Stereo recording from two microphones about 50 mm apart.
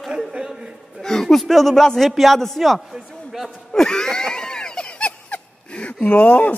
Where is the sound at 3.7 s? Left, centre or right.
Centre.